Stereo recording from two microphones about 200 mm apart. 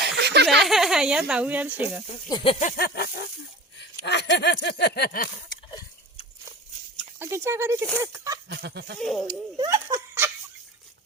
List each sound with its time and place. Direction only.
0.2 s a sound: 55° right (ahead or behind)
0.6 s speech: centre (ahead or behind)
2.3 s snake: 25° left (ahead or behind); by 3.2 s 50° left (ahead or behind)
4.0 s a sound: 60° left (ahead or behind)
7.2 s speech: 10° right (ahead or behind)
8.4 s speech: 55° right (ahead or behind)
9.0 s speech: centre (ahead or behind)
9.6 s giggle: 15° right (ahead or behind)